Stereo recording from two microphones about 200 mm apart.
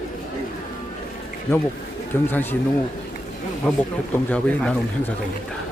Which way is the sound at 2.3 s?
10° left (ahead or behind).